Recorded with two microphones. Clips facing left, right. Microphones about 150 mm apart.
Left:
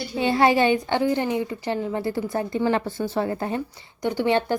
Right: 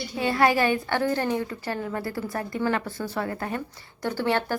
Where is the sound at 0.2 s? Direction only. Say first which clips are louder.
Left 3 dB; 25° left (ahead or behind).